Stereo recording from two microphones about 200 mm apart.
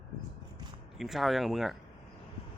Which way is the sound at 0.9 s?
Centre (ahead or behind).